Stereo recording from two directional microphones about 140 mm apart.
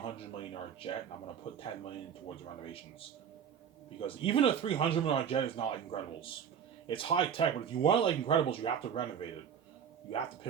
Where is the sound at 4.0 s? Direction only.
40° left (ahead or behind).